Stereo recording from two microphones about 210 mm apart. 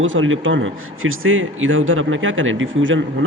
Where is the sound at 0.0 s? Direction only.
65° right (ahead or behind).